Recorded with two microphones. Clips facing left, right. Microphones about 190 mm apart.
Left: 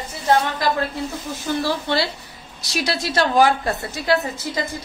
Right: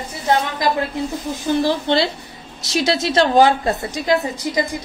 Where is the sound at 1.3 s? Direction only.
15° right (ahead or behind).